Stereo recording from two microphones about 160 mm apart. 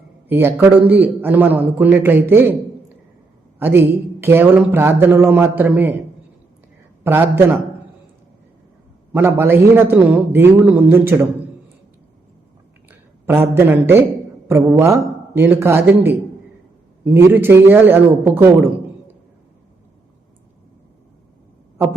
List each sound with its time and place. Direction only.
0.3 s speech: 15° right (ahead or behind)
3.6 s speech: 15° right (ahead or behind)
7.0 s speech: 15° right (ahead or behind)
9.1 s speech: 15° right (ahead or behind)
12.9 s a man's voice: 15° right (ahead or behind)